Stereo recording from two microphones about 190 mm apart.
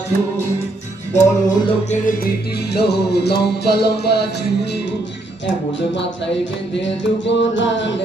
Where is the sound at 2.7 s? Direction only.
60° left (ahead or behind).